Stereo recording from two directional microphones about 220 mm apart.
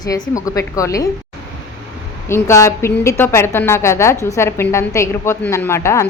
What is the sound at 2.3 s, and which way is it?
A woman's voice, 15° left (ahead or behind).